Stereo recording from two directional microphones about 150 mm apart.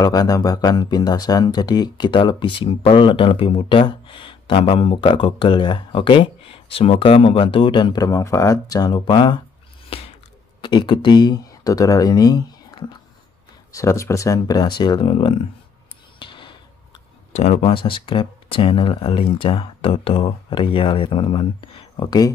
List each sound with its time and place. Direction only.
0.0 s speech: 25° left (ahead or behind)
9.8 s a sound: 40° left (ahead or behind)
10.6 s speech: 30° left (ahead or behind)
13.7 s speech: 20° left (ahead or behind); by 15.4 s 35° left (ahead or behind)
16.2 s a sound: 35° left (ahead or behind)
17.3 s speech: 45° left (ahead or behind); by 22.3 s 30° left (ahead or behind)